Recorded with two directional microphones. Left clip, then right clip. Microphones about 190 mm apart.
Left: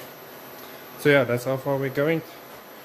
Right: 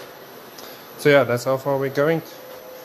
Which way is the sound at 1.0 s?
5° left (ahead or behind).